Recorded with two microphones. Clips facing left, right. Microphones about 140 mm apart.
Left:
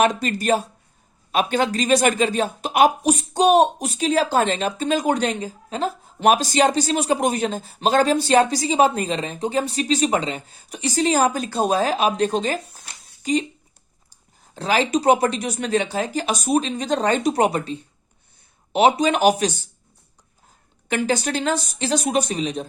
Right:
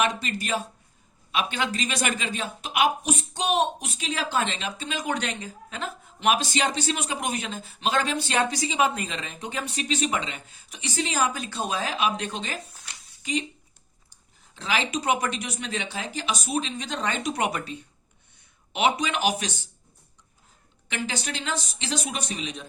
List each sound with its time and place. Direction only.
0.0 s speech: 45° left (ahead or behind)
20.8 s speech: 45° left (ahead or behind)